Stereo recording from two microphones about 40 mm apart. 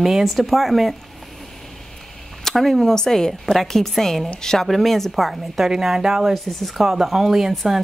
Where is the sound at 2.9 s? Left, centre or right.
Centre.